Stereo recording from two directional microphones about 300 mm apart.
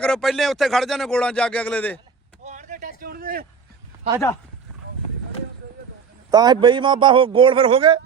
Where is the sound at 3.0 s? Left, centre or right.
Right.